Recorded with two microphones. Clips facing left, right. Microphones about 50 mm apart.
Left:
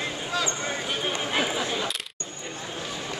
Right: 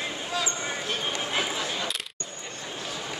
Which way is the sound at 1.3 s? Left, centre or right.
Centre.